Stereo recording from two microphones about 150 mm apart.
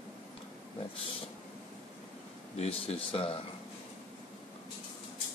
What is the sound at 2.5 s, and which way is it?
Speech, 40° left (ahead or behind).